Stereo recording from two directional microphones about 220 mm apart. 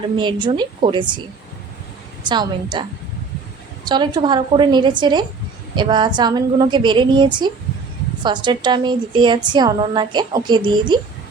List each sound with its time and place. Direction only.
0.2 s a woman's voice: 20° right (ahead or behind)
2.2 s a woman's voice: 20° right (ahead or behind)
3.8 s a woman's voice: 20° right (ahead or behind)